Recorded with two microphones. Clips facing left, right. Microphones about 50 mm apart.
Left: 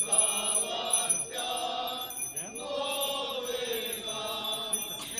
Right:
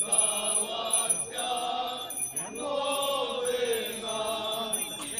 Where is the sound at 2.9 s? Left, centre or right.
Right.